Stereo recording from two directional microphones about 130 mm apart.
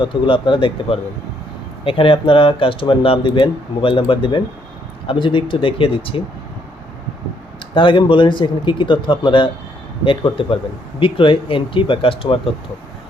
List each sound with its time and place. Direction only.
0.0 s speech: 40° left (ahead or behind)
7.7 s speech: 40° left (ahead or behind)